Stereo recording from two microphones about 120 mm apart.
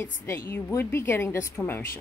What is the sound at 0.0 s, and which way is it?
A woman's voice, 15° left (ahead or behind).